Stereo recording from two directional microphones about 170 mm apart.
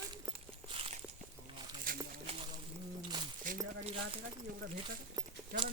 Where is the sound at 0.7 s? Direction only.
35° right (ahead or behind).